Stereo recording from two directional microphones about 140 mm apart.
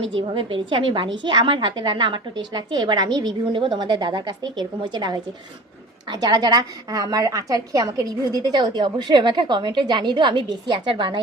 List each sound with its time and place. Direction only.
0.2 s a woman's voice: 40° right (ahead or behind)